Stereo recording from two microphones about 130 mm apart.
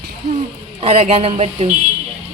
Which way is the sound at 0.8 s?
60° right (ahead or behind).